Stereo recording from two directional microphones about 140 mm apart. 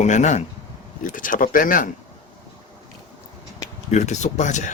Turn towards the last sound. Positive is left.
turn(degrees=60)  # may be behind; listen again after turning